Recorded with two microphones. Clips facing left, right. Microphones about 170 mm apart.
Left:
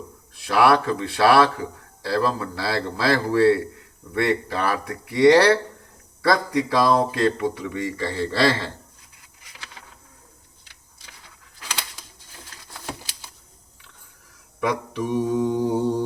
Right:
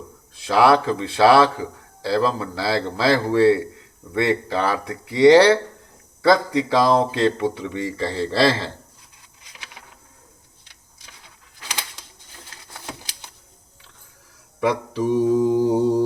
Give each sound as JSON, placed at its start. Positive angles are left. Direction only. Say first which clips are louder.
{"t": 0.3, "sound": "speech", "louder": "right 2 dB", "side_deg": -25}
{"t": 14.6, "sound": "mantra", "louder": "right 4 dB", "side_deg": -30}
{"t": 15.2, "sound": "speech", "louder": "right 5 dB", "side_deg": -30}